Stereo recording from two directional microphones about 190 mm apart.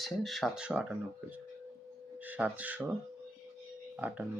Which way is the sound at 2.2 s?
10° right (ahead or behind).